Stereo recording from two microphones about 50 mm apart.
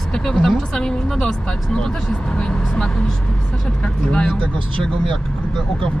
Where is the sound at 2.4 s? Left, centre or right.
Centre.